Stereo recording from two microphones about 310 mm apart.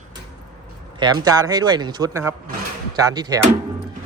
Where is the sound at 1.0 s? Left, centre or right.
Centre.